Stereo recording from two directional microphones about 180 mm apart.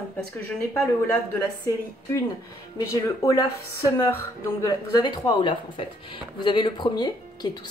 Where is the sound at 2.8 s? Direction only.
15° left (ahead or behind).